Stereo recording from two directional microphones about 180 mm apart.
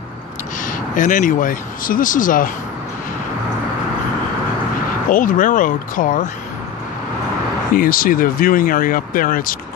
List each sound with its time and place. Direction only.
0.6 s speech: 45° left (ahead or behind)
5.1 s speech: 50° left (ahead or behind)
7.7 s speech: 50° left (ahead or behind)